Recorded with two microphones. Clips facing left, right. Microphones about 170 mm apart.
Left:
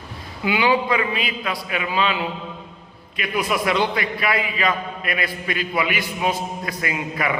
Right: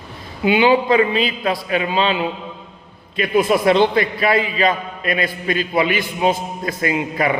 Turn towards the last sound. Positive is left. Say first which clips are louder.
# right 6 dB
turn(degrees=-30)  # may be behind; listen again after turning